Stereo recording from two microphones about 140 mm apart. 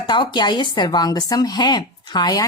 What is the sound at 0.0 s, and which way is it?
A woman's voice, 30° left (ahead or behind).